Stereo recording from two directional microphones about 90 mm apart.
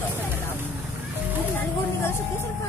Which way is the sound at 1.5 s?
25° left (ahead or behind).